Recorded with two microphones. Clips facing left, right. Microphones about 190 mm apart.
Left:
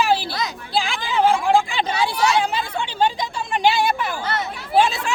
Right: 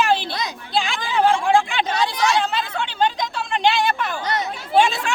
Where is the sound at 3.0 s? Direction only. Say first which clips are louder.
Even; 10° left (ahead or behind).